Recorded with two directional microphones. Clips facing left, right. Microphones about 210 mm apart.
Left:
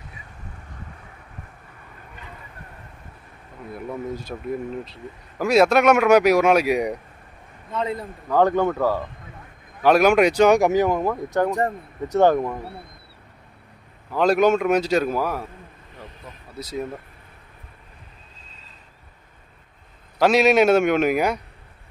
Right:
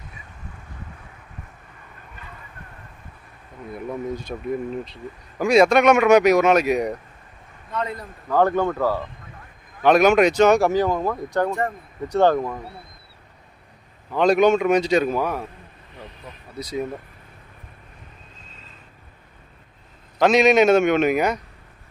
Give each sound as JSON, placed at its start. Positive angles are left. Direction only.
{"t": 4.1, "sound": "a man's voice", "side_deg": 5}
{"t": 7.7, "sound": "a man's voice", "side_deg": 25}
{"t": 8.3, "sound": "speech", "side_deg": 15}
{"t": 9.8, "sound": "speech", "side_deg": 5}
{"t": 14.1, "sound": "a man's voice", "side_deg": 5}
{"t": 16.5, "sound": "a man's voice", "side_deg": 5}
{"t": 20.2, "sound": "speech", "side_deg": 5}